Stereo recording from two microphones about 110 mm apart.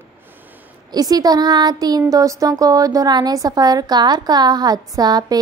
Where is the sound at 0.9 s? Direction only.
35° right (ahead or behind).